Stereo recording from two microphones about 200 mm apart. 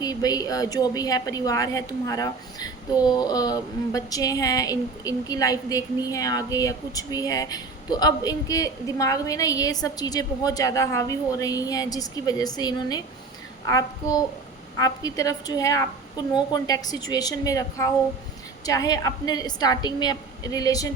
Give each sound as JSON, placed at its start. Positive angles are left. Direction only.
{"t": 0.0, "sound": "a woman's voice", "side_deg": 20}